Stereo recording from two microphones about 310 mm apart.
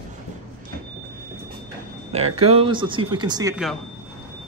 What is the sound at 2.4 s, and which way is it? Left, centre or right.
Speech, centre.